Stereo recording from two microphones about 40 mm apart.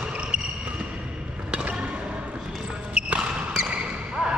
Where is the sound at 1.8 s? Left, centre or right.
Right.